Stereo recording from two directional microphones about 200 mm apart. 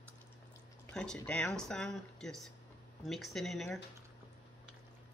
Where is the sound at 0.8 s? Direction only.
5° left (ahead or behind).